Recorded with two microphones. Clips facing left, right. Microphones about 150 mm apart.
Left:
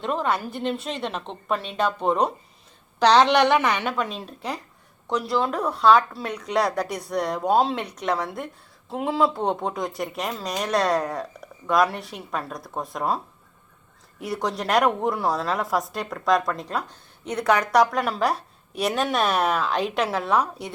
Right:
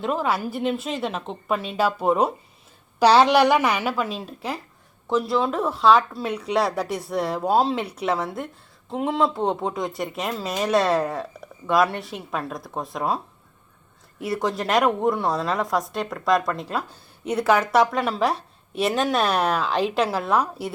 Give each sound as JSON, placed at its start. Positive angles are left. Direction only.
{"t": 0.0, "sound": "a woman's voice", "side_deg": -5}
{"t": 14.2, "sound": "a woman's voice", "side_deg": 0}